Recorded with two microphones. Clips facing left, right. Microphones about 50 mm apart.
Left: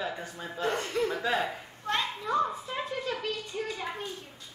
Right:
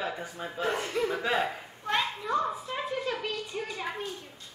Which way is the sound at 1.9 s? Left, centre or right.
Centre.